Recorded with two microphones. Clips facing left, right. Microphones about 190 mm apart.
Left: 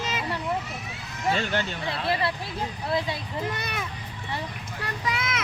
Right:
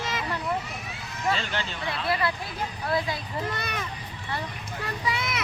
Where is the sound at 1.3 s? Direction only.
50° left (ahead or behind).